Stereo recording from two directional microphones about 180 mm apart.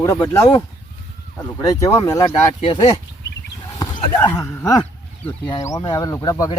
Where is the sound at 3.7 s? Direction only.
25° left (ahead or behind).